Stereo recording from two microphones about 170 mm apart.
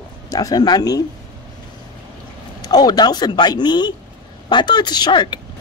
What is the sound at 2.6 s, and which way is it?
Speech, 25° left (ahead or behind).